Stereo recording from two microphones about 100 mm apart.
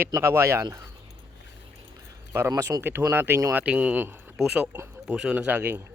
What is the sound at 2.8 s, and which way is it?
Speech, 25° right (ahead or behind).